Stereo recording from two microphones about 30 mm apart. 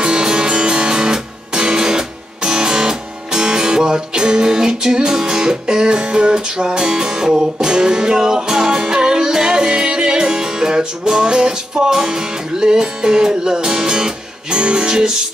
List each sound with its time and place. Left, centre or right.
0.0 s music: right